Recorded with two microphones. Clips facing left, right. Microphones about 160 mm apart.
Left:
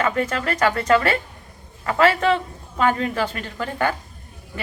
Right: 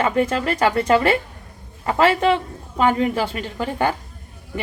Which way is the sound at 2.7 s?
20° right (ahead or behind).